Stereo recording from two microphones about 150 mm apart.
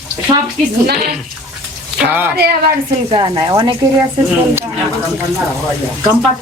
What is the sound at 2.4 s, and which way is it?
Speech, 90° right.